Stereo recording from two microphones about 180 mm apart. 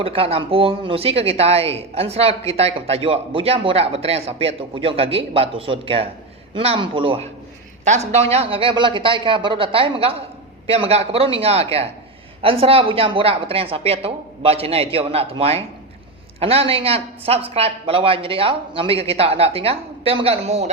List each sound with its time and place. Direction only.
0.0 s a man's voice: 30° right (ahead or behind)